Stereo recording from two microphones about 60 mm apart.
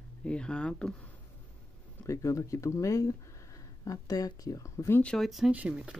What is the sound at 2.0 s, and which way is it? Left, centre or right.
Speech, left.